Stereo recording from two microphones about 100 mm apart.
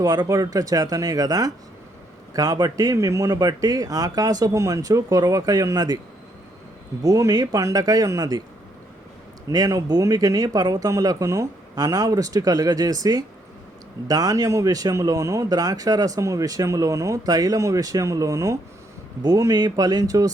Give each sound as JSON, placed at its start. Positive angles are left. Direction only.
{"t": 0.0, "sound": "speech", "side_deg": -40}
{"t": 7.0, "sound": "speech", "side_deg": -35}
{"t": 9.5, "sound": "speech", "side_deg": -35}